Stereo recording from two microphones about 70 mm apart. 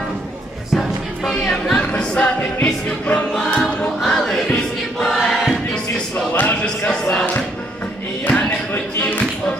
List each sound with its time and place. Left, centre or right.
0.7 s music: centre
1.7 s music: centre
4.5 s choir: centre
5.1 s choir: centre
6.3 s music: left
6.8 s chant: centre
8.2 s a sound: left